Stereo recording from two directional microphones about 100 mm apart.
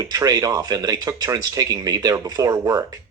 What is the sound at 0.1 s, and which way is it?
Speech, 35° right (ahead or behind).